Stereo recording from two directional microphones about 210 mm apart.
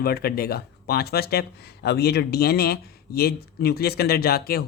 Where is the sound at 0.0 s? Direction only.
45° left (ahead or behind).